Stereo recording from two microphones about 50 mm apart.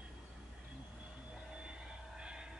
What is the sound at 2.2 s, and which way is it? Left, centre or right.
Vehicle, centre.